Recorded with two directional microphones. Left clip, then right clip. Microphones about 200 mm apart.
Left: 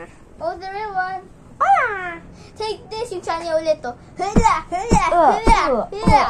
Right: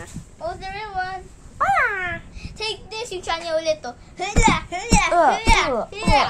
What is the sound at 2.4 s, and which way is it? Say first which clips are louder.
A child's voice: left 5 dB; 25° left (ahead or behind).